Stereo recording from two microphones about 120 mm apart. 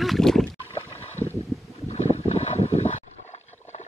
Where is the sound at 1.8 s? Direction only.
65° left (ahead or behind).